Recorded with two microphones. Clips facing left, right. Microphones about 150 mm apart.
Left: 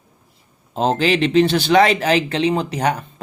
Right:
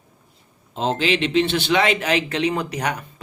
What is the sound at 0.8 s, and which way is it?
Speech, 45° left (ahead or behind).